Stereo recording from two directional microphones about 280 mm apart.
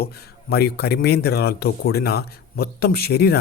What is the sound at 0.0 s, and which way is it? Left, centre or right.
Speech, left.